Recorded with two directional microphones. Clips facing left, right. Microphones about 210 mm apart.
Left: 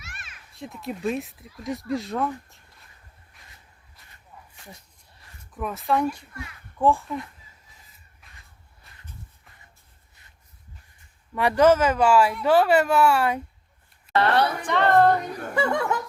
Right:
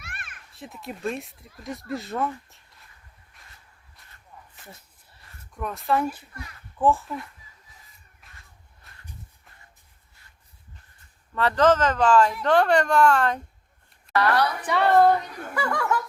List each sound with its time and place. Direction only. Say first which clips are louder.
0.0 s a sound: right 3 dB; 55° right (ahead or behind)
0.5 s speech: left 4 dB; centre (ahead or behind)
3.3 s a sound: even; centre (ahead or behind)
4.0 s walk: even; centre (ahead or behind)
5.2 s speech: left 1 dB; centre (ahead or behind)
8.2 s crow: right 1 dB; centre (ahead or behind)
8.8 s a sound: right 1 dB; centre (ahead or behind)
11.3 s speech: left 2 dB; 10° left (ahead or behind)
14.1 s a woman's voice: left 1 dB; 25° left (ahead or behind)
14.6 s a woman's voice: right 1 dB; 10° right (ahead or behind)
15.5 s speech: left 2 dB; 25° left (ahead or behind)